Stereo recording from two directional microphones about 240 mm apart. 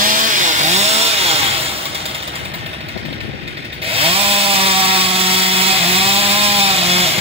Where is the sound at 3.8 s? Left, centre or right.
Right.